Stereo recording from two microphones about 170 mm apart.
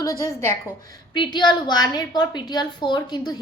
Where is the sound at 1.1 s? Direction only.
25° left (ahead or behind).